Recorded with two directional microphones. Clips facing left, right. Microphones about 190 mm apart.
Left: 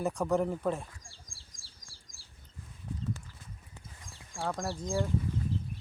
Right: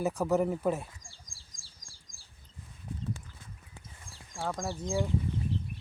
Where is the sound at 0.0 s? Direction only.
5° right (ahead or behind).